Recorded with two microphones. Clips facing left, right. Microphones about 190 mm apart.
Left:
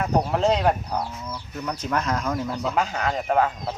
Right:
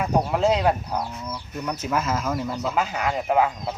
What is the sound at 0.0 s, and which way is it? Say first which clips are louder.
Speech: even; 5° right (ahead or behind).